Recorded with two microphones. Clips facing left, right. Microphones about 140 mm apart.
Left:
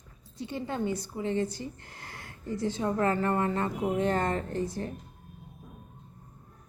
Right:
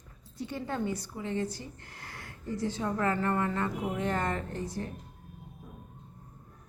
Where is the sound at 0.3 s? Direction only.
20° left (ahead or behind).